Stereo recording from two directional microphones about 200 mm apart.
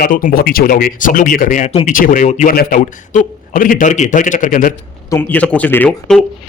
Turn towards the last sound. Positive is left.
turn(degrees=5)  # may be behind; listen again after turning